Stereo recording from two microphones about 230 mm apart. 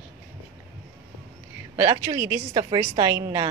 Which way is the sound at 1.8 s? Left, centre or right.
Centre.